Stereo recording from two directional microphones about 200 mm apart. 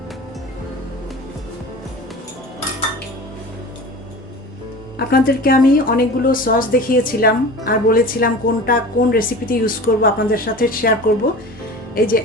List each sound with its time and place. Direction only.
4.9 s speech: 50° left (ahead or behind)
11.9 s speech: 45° left (ahead or behind)